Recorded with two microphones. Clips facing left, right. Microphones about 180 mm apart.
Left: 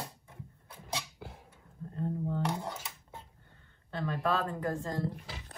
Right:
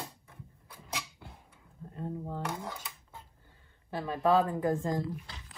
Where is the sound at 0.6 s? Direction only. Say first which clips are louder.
Left 2 dB; 30° left (ahead or behind).